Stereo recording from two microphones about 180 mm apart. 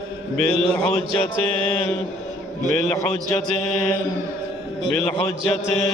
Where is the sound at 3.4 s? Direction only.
5° left (ahead or behind).